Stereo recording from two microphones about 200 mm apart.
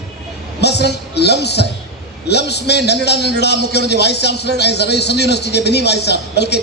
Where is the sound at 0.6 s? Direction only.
55° left (ahead or behind).